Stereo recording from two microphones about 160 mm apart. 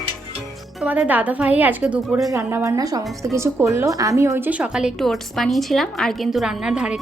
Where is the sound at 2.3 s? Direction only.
15° right (ahead or behind).